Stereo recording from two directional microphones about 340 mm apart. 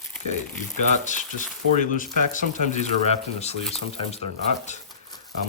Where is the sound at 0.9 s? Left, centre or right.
Left.